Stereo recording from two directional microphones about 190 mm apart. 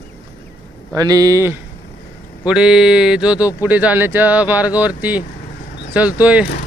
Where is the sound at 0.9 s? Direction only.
20° right (ahead or behind).